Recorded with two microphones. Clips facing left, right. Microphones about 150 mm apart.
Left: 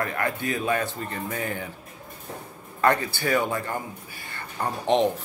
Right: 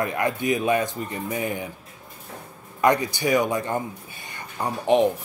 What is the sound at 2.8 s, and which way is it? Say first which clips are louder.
Speech: right 2 dB; 15° right (ahead or behind).